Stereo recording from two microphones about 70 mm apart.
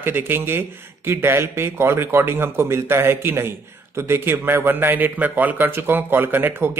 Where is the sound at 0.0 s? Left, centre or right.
Right.